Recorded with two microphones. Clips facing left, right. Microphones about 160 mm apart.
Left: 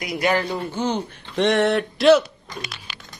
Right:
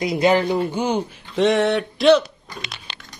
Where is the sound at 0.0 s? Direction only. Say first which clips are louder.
Right 5 dB; 25° right (ahead or behind).